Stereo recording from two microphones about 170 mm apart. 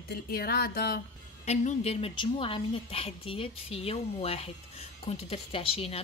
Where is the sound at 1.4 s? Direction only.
40° left (ahead or behind).